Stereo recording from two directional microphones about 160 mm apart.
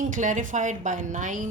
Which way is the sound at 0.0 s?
50° right (ahead or behind).